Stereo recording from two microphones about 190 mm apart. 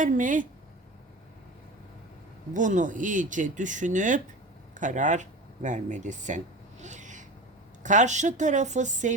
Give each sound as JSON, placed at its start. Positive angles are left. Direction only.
{"t": 0.0, "sound": "speech", "side_deg": -45}
{"t": 2.5, "sound": "speech", "side_deg": -40}